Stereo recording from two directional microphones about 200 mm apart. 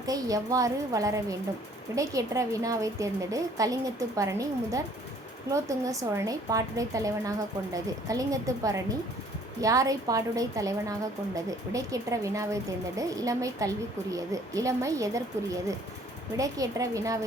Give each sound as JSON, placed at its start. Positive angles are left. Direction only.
{"t": 0.0, "sound": "a woman's voice", "side_deg": -15}